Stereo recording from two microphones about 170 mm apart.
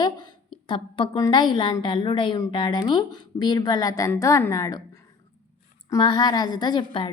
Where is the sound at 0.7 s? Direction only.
30° left (ahead or behind).